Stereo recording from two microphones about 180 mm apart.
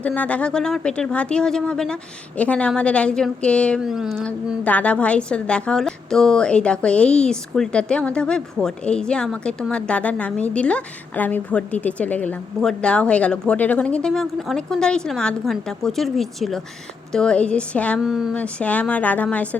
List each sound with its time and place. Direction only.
0.0 s a woman's voice: 5° left (ahead or behind)